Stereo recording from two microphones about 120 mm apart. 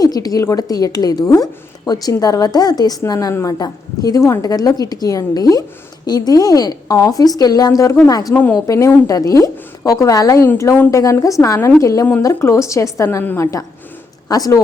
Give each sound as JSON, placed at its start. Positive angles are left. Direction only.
{"t": 0.0, "sound": "a woman's voice", "side_deg": 30}